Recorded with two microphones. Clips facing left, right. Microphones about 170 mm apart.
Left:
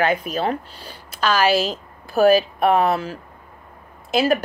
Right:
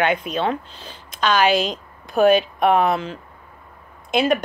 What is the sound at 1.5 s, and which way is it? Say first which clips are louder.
Speech: even; 5° left (ahead or behind).